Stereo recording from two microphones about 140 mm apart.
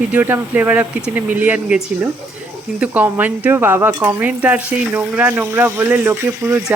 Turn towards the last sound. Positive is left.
turn(degrees=-15)  # may be behind; listen again after turning